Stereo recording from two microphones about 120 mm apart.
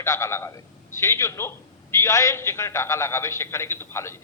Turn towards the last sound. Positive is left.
turn(degrees=20)  # may be behind; listen again after turning